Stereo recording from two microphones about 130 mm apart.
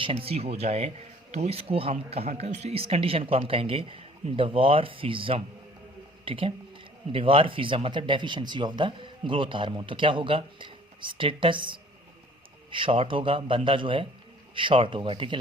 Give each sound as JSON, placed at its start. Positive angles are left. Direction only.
{"t": 0.0, "sound": "speech", "side_deg": -45}